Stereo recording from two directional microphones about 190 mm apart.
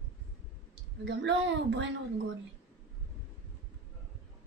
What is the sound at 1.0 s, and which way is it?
Speech, 75° right (ahead or behind).